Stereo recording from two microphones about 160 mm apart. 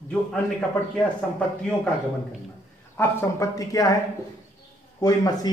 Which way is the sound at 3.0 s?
20° left (ahead or behind).